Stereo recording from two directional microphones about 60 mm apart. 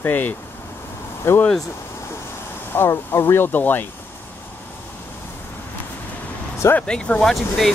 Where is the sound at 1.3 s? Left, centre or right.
Left.